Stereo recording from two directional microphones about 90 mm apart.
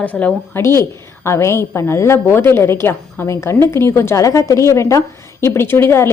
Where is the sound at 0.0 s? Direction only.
15° left (ahead or behind).